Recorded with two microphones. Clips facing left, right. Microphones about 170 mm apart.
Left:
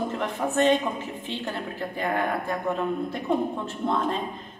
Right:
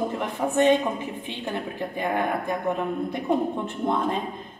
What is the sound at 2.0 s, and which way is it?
A woman's voice, 15° right (ahead or behind).